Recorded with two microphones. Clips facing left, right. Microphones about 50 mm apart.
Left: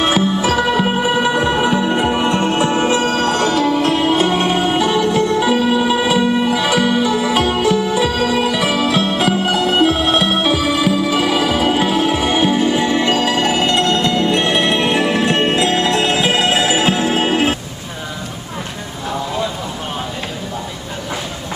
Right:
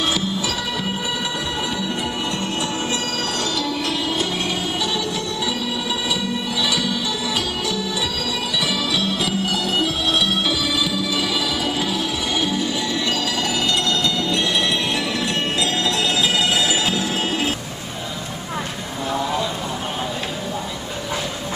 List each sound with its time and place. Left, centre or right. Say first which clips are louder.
0.0 s music: left 7 dB; left